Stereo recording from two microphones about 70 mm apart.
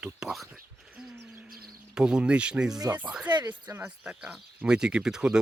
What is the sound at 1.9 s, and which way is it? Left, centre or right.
Speech, centre.